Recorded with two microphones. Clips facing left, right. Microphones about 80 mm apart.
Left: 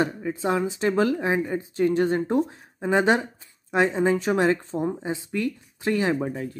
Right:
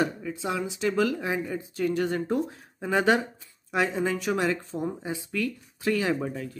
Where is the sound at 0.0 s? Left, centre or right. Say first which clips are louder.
Left 3 dB; left.